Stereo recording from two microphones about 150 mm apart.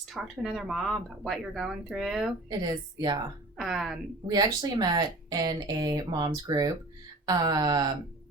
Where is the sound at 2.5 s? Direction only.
30° right (ahead or behind).